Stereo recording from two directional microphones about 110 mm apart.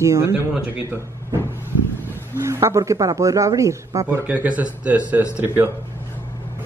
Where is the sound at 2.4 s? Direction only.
25° right (ahead or behind).